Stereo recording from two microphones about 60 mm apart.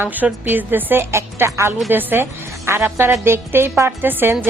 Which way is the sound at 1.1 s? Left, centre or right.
Right.